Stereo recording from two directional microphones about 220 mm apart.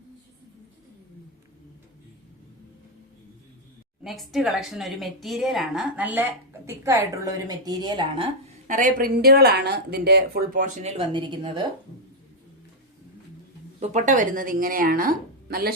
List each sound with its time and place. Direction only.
4.0 s speech: centre (ahead or behind); by 8.3 s 20° right (ahead or behind)
8.6 s a woman's voice: 35° right (ahead or behind)
10.9 s speech: 20° right (ahead or behind)
13.7 s a woman's voice: 35° right (ahead or behind)